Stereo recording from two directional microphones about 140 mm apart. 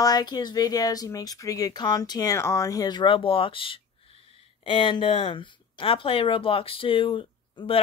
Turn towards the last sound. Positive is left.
turn(degrees=40)  # may be behind; listen again after turning